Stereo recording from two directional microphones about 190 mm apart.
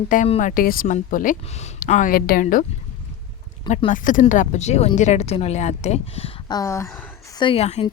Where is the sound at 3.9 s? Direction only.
45° left (ahead or behind).